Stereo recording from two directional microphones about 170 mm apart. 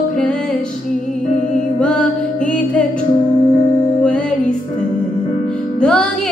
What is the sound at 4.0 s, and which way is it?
Music, 5° left (ahead or behind).